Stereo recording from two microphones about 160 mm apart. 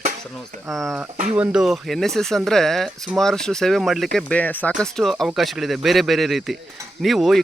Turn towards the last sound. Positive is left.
turn(degrees=0)  # may be behind; listen again after turning